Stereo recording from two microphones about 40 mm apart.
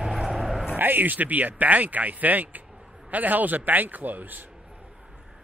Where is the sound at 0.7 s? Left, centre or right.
Right.